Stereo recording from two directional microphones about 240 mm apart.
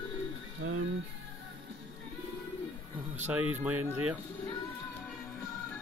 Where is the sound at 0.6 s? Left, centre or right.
Right.